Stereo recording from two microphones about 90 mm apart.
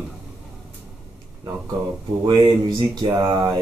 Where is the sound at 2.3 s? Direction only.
55° right (ahead or behind).